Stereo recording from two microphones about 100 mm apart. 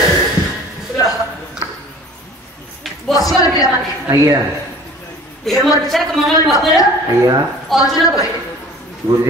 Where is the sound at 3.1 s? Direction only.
5° left (ahead or behind).